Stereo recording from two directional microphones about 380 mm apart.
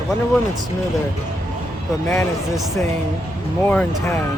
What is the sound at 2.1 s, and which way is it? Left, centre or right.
Speech, centre.